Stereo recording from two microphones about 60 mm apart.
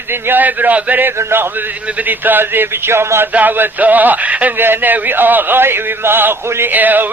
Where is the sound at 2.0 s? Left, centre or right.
Right.